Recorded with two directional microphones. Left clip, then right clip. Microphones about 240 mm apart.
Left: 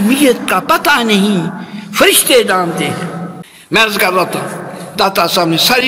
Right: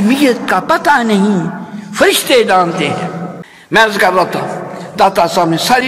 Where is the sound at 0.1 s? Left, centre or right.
Left.